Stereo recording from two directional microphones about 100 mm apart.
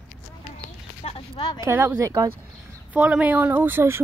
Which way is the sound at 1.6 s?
20° right (ahead or behind).